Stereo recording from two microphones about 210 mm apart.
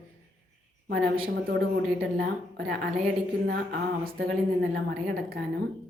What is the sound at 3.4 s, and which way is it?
A woman's voice, 45° right (ahead or behind).